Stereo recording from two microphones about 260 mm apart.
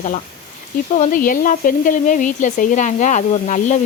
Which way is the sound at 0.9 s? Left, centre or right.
Left.